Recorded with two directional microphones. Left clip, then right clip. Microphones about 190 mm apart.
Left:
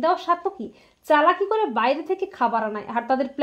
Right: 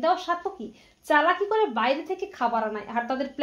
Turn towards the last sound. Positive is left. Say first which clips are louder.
# left 5 dB
turn(degrees=45)  # may be behind; listen again after turning